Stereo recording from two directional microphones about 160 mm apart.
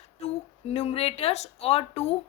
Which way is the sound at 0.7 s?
40° left (ahead or behind).